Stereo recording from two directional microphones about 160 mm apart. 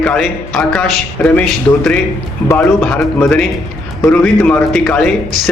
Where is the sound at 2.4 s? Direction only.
10° left (ahead or behind).